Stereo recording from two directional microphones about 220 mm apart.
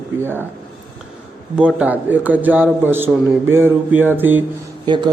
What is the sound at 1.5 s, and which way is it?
A man's voice, 5° right (ahead or behind).